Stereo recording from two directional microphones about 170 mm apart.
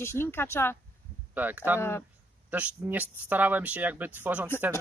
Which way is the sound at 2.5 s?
10° right (ahead or behind).